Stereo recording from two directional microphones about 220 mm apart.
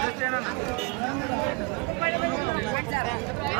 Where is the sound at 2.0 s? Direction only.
Centre (ahead or behind).